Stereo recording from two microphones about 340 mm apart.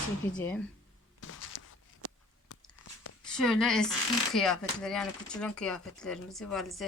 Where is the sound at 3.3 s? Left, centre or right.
Centre.